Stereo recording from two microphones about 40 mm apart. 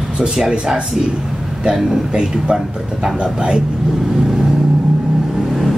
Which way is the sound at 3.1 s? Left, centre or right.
Right.